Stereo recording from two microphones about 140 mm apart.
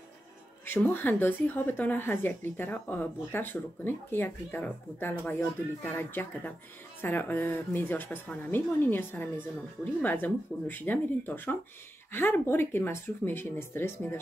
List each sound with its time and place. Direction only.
0.7 s speech: 15° left (ahead or behind)